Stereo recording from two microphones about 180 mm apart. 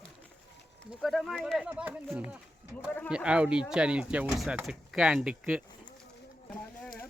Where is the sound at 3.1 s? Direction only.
5° right (ahead or behind).